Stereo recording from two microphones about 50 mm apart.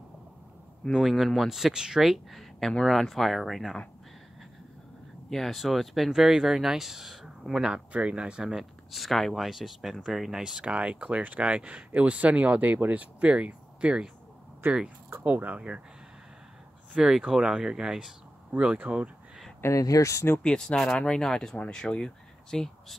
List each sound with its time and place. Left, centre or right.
0.9 s speech: centre
2.7 s speech: centre
5.3 s speech: centre
8.9 s speech: centre
10.6 s speech: centre
14.6 s speech: right
15.2 s speech: right
16.9 s speech: centre
18.9 s speech: right
19.6 s speech: left
20.4 s speech: centre